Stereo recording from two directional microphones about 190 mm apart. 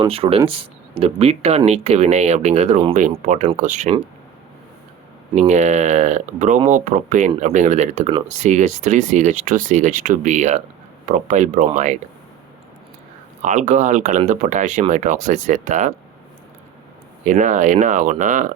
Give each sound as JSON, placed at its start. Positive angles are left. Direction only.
{"t": 0.0, "sound": "speech", "side_deg": -30}
{"t": 5.3, "sound": "speech", "side_deg": -35}
{"t": 13.4, "sound": "speech", "side_deg": -40}
{"t": 17.2, "sound": "speech", "side_deg": -40}